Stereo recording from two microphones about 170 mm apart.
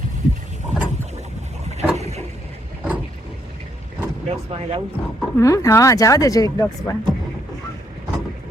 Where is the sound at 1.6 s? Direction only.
40° right (ahead or behind).